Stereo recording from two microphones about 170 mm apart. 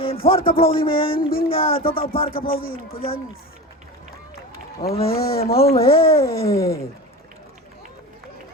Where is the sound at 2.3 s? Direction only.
60° left (ahead or behind).